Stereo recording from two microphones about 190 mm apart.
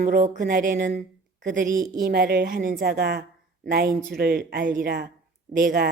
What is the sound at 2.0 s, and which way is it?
A woman's voice, 55° right (ahead or behind).